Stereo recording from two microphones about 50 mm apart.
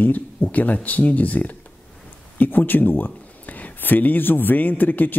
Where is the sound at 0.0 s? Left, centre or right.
Left.